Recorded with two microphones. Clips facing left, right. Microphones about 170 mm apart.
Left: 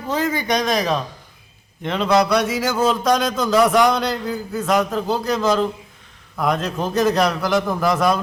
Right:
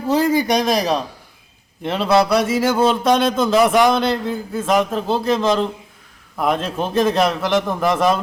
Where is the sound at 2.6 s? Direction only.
30° right (ahead or behind).